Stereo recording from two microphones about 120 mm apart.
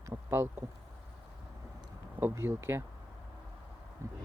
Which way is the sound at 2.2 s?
20° right (ahead or behind).